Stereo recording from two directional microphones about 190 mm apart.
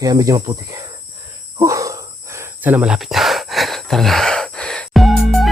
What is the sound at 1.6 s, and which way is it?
Cricket, 15° right (ahead or behind).